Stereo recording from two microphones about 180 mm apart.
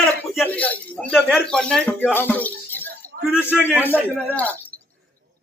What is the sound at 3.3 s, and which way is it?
Speech, 10° right (ahead or behind).